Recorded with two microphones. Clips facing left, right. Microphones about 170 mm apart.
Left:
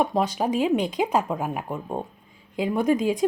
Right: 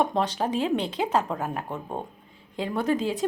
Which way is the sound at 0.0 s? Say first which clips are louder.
Left 2 dB; 10° left (ahead or behind).